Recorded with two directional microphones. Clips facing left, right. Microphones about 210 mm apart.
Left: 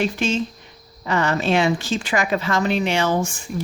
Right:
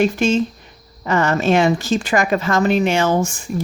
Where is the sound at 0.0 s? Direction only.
45° right (ahead or behind).